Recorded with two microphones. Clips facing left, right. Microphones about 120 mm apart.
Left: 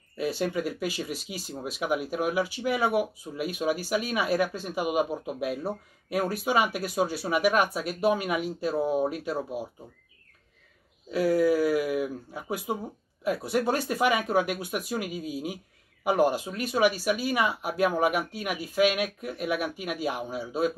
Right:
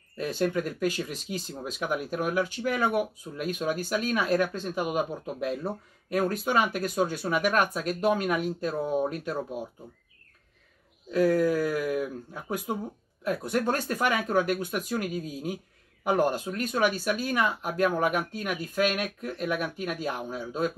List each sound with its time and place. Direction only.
0.2 s speech: 10° left (ahead or behind)
11.1 s speech: 10° left (ahead or behind)